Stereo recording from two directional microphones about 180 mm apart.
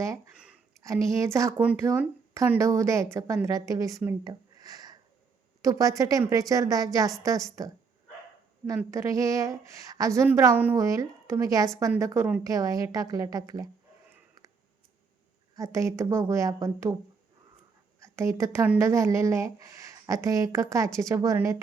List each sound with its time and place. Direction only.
0.8 s speech: 15° right (ahead or behind)
8.8 s speech: 15° right (ahead or behind)
15.5 s speech: 20° right (ahead or behind)
18.0 s speech: 15° right (ahead or behind)